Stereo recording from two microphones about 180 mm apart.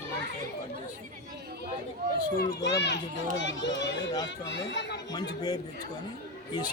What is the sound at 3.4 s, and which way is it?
Speech, 85° left.